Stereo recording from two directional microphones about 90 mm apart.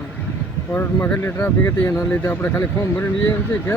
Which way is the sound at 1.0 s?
20° left (ahead or behind).